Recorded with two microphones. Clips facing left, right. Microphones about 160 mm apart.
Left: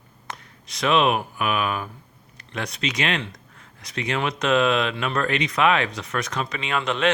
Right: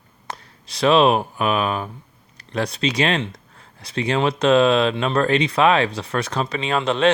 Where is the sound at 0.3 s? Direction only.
30° right (ahead or behind).